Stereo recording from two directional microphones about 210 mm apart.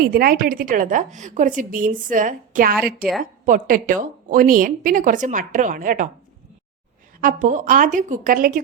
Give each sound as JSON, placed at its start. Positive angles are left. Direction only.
{"t": 0.0, "sound": "a woman's voice", "side_deg": -45}
{"t": 7.2, "sound": "a woman's voice", "side_deg": -40}